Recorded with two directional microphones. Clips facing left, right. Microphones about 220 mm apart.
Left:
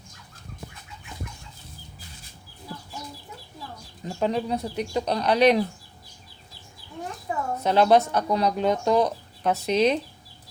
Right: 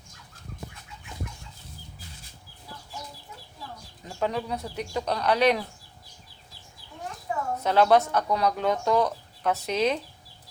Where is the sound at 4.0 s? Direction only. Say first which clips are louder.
Left 3 dB; 25° left (ahead or behind).